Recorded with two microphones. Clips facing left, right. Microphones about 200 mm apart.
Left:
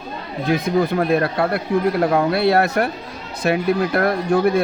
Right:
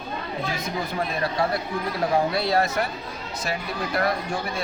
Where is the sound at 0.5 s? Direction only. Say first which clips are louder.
Left 15 dB; 60° left (ahead or behind).